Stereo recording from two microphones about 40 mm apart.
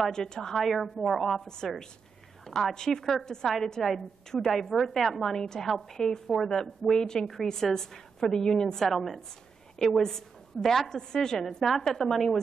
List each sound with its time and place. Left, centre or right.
0.1 s a woman's voice: centre
0.6 s a woman's voice: centre
5.3 s a woman's voice: centre